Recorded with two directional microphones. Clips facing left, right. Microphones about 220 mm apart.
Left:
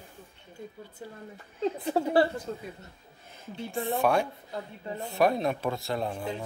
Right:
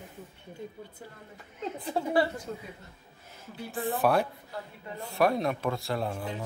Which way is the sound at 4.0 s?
5° right (ahead or behind).